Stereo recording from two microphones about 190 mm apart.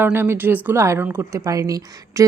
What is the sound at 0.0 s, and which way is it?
A woman's voice, 10° right (ahead or behind).